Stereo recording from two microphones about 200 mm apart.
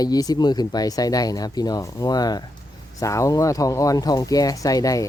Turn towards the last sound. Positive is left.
turn(degrees=15)  # may be behind; listen again after turning